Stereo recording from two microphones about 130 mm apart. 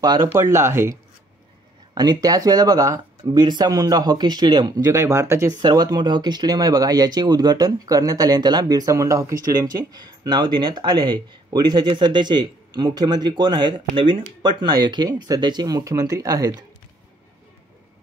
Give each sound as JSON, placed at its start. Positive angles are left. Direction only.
{"t": 0.3, "sound": "speech", "side_deg": -20}
{"t": 2.0, "sound": "speech", "side_deg": -30}
{"t": 4.8, "sound": "speech", "side_deg": -20}